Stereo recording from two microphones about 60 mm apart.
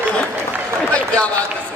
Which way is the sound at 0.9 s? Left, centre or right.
Centre.